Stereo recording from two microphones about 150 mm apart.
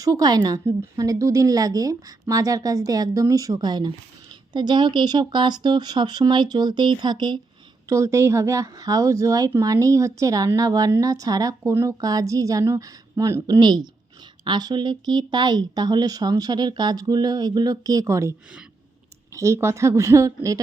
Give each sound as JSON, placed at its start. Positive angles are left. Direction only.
{"t": 0.0, "sound": "speech", "side_deg": -25}